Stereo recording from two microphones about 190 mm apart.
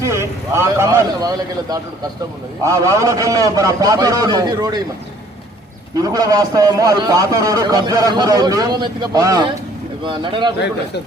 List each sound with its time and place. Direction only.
0.0 s a man's voice: 15° right (ahead or behind)
6.0 s a man's voice: 20° right (ahead or behind)